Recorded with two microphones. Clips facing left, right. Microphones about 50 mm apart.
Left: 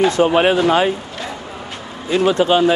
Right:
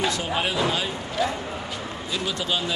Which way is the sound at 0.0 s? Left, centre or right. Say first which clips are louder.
Left 12 dB; left.